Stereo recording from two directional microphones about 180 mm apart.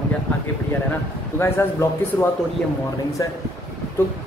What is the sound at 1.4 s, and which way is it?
Speech, 15° left (ahead or behind).